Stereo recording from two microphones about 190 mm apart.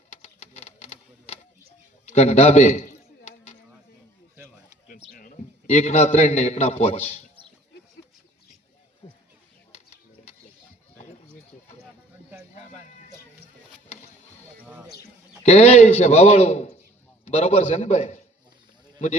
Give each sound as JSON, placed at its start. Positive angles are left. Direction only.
{"t": 0.1, "sound": "typewriter", "side_deg": 35}
{"t": 2.0, "sound": "a sound", "side_deg": 35}
{"t": 5.1, "sound": "a man's voice", "side_deg": 45}
{"t": 9.0, "sound": "a sound", "side_deg": 30}
{"t": 14.6, "sound": "basketball bounce", "side_deg": -10}
{"t": 15.4, "sound": "a man's voice", "side_deg": 35}